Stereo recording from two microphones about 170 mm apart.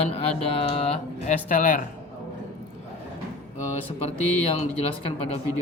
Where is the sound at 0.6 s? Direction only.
35° left (ahead or behind); by 1.8 s 50° left (ahead or behind).